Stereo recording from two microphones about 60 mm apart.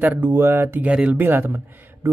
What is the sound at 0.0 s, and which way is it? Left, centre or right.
Speech, right.